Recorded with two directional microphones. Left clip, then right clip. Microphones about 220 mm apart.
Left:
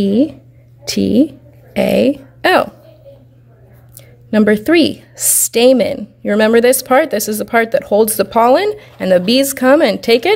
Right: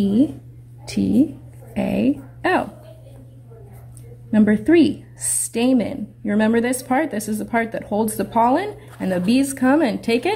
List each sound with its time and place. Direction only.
0.0 s a woman's voice: 50° left (ahead or behind)
4.3 s a woman's voice: 55° left (ahead or behind)